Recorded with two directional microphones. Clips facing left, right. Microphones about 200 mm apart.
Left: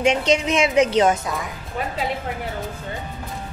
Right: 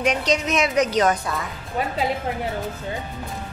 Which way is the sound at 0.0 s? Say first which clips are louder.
Left 3 dB; 25° left (ahead or behind).